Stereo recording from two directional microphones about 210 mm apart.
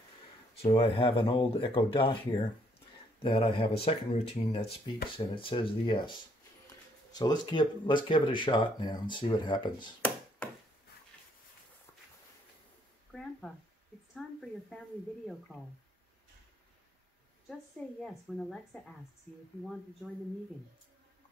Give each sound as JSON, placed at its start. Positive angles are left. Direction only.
{"t": 0.6, "sound": "speech", "side_deg": 30}
{"t": 4.6, "sound": "speech", "side_deg": 50}
{"t": 5.1, "sound": "speech", "side_deg": 25}
{"t": 14.1, "sound": "a woman's voice", "side_deg": 5}
{"t": 18.0, "sound": "a woman's voice", "side_deg": 5}